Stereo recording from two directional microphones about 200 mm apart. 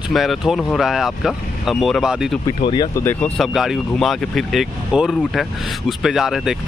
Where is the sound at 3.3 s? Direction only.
Centre (ahead or behind).